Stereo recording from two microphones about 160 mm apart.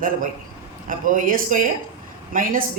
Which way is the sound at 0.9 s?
55° right (ahead or behind).